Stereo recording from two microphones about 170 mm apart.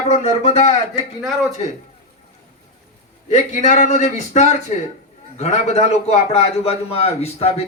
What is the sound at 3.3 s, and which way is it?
A man's voice, 45° left (ahead or behind).